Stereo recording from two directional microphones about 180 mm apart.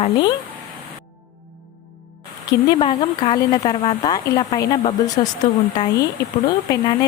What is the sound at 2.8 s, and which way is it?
A woman's voice, 30° left (ahead or behind).